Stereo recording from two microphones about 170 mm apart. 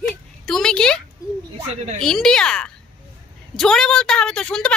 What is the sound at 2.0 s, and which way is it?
Speech, 5° left (ahead or behind).